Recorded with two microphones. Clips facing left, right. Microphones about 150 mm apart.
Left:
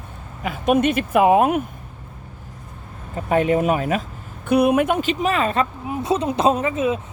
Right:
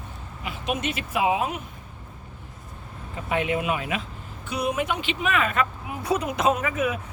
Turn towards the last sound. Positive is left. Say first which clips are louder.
# left 5 dB
turn(degrees=25)  # may be behind; listen again after turning